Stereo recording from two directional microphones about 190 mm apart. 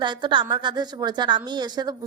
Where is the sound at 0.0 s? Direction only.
25° right (ahead or behind).